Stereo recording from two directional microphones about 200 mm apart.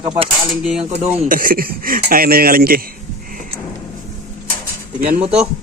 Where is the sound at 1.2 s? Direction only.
45° right (ahead or behind).